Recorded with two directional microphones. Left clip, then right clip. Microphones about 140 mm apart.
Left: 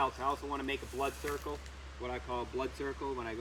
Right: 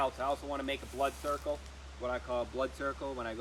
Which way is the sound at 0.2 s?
30° right (ahead or behind).